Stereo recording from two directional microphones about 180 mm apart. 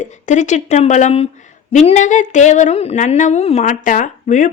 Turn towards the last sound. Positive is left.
turn(degrees=45)  # may be behind; listen again after turning